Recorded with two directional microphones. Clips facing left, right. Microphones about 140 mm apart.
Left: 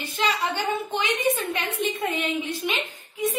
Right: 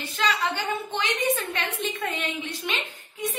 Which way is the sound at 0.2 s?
20° left (ahead or behind).